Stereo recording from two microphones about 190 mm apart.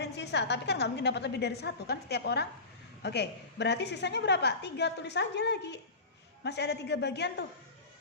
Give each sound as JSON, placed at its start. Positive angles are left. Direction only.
{"t": 0.0, "sound": "a woman's voice", "side_deg": 65}